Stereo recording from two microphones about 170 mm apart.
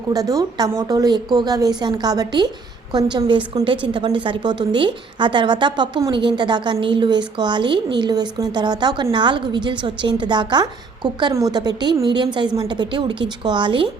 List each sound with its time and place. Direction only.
0.1 s a woman's voice: 20° right (ahead or behind)